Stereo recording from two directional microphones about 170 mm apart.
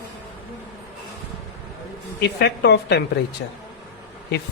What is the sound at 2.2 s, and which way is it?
A woman's voice, 80° left.